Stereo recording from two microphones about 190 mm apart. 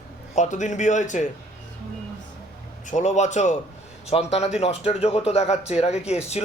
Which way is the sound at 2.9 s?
40° left (ahead or behind).